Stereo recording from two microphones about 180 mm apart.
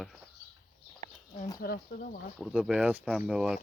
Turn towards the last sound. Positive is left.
turn(degrees=-5)  # may be behind; listen again after turning